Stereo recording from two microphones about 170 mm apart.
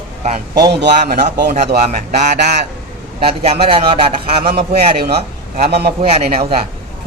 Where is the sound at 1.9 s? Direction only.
45° right (ahead or behind).